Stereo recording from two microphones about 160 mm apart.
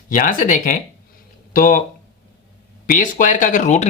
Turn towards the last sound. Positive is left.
turn(degrees=45)  # may be behind; listen again after turning